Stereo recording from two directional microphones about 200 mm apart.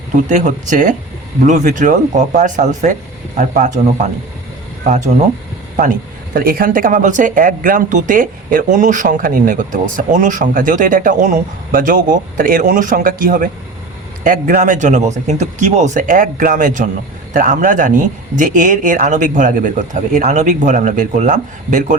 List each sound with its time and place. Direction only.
0.3 s speech: 40° right (ahead or behind)
4.9 s speech: 40° right (ahead or behind)
6.3 s speech: 45° right (ahead or behind)